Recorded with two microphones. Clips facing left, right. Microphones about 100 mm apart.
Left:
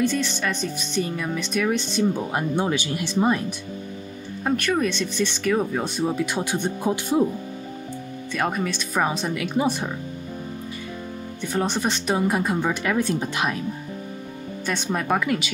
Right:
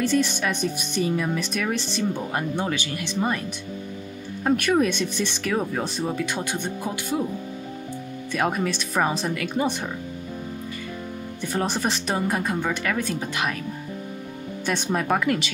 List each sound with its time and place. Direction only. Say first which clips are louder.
0.0 s speech: right 1 dB; centre (ahead or behind)
0.3 s speech: right 1 dB; 10° right (ahead or behind)
2.6 s speech: left 3 dB; 15° left (ahead or behind)
4.5 s speech: right 2 dB; 5° right (ahead or behind); by 7.2 s 20° left (ahead or behind)
8.4 s speech: right 1 dB; 5° right (ahead or behind)
11.5 s speech: left 1 dB; centre (ahead or behind); by 13.6 s 15° left (ahead or behind)
14.7 s speech: even; centre (ahead or behind)